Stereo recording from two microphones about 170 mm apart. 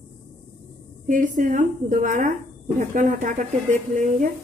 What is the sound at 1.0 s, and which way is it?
A woman's voice, 50° right (ahead or behind).